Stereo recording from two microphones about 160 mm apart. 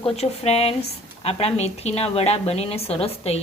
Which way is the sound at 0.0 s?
40° left (ahead or behind).